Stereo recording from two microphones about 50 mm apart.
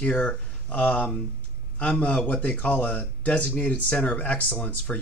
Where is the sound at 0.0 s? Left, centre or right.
Left.